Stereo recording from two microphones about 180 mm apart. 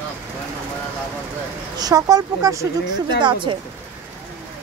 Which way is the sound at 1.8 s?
20° right (ahead or behind).